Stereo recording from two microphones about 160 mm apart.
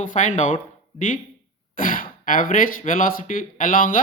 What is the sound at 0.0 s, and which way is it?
Speech, 55° left (ahead or behind).